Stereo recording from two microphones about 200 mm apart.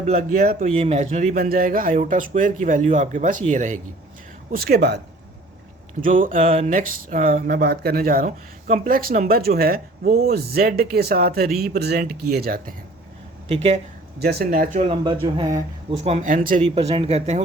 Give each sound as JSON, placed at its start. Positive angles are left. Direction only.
{"t": 0.2, "sound": "speech", "side_deg": -50}
{"t": 0.7, "sound": "speech", "side_deg": -35}
{"t": 4.5, "sound": "speech", "side_deg": -50}
{"t": 6.0, "sound": "speech", "side_deg": -45}
{"t": 6.4, "sound": "speech", "side_deg": -30}
{"t": 13.5, "sound": "speech", "side_deg": -30}
{"t": 14.2, "sound": "speech", "side_deg": -55}
{"t": 15.0, "sound": "speech", "side_deg": -20}
{"t": 15.9, "sound": "speech", "side_deg": -30}
{"t": 16.7, "sound": "speech", "side_deg": -30}